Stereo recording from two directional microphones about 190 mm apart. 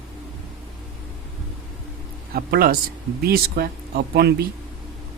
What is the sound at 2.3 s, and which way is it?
Speech, 55° right (ahead or behind).